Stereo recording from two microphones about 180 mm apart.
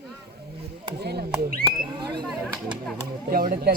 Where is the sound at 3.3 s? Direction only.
55° right (ahead or behind).